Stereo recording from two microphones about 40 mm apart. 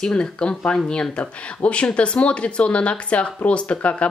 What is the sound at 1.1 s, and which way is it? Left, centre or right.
Speech, left.